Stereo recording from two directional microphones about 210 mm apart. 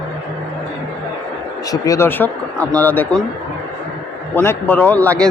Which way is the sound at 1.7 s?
15° left (ahead or behind).